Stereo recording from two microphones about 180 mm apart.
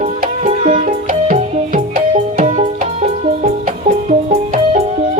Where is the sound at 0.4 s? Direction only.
35° right (ahead or behind).